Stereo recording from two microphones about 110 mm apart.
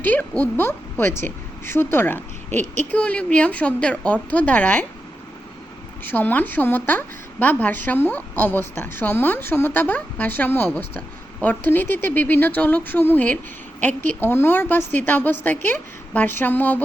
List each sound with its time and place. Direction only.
0.0 s a woman's voice: 15° left (ahead or behind)
6.1 s a woman's voice: 15° left (ahead or behind)